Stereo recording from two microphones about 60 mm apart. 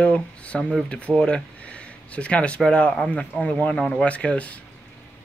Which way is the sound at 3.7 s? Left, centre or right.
Centre.